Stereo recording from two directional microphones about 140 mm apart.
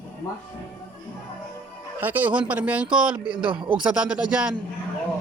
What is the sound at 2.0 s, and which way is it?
Speech, 10° right (ahead or behind).